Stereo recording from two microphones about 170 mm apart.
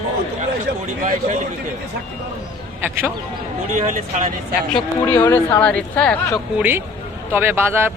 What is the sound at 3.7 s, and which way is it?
Speech, 50° right (ahead or behind).